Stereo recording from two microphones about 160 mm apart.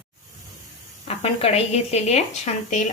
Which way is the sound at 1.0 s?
40° left (ahead or behind).